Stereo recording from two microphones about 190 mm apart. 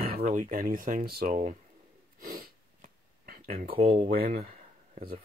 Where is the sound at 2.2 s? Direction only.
50° right (ahead or behind).